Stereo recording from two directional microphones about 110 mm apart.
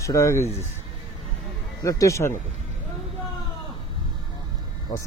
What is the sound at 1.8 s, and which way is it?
Speech, 30° left (ahead or behind).